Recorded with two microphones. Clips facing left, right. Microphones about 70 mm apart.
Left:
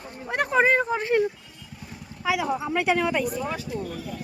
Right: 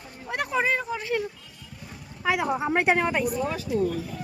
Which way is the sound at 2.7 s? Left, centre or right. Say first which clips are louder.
Right 1 dB; right.